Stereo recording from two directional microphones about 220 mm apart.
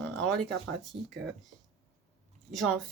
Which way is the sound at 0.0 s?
5° left (ahead or behind).